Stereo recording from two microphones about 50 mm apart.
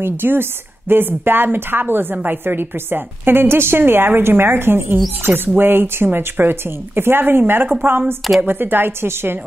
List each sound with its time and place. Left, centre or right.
0.0 s a woman's voice: right